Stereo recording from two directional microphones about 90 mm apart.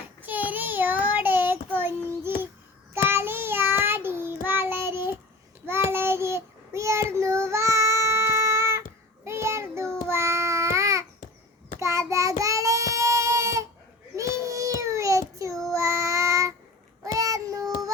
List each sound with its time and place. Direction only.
0.2 s child singing: 20° right (ahead or behind)
10.1 s babbling: 30° right (ahead or behind)
11.8 s child singing: 35° right (ahead or behind)